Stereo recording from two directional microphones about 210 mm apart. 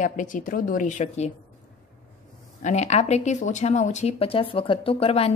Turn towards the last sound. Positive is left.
turn(degrees=25)  # may be behind; listen again after turning